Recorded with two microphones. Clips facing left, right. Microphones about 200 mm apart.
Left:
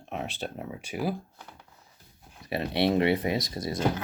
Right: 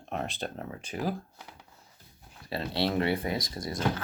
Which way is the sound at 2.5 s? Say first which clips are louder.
Left 4 dB; 20° left (ahead or behind).